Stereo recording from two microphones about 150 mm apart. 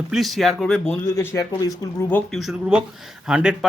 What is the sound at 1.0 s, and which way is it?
Speech, 20° left (ahead or behind).